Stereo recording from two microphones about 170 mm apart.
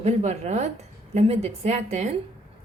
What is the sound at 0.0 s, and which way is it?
A woman's voice, 40° right (ahead or behind).